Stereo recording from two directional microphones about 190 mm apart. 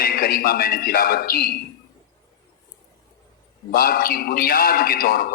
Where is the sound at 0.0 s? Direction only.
50° left (ahead or behind).